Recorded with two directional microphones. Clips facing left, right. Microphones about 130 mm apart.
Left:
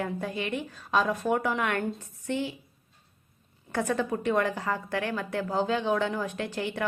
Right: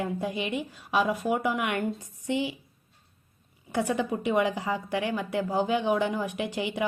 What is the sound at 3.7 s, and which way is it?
A woman's voice, 15° right (ahead or behind).